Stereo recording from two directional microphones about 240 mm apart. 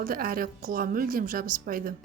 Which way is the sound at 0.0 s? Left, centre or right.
Right.